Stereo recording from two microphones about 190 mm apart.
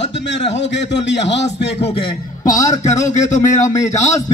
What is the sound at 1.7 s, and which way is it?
A man's voice, 30° left (ahead or behind).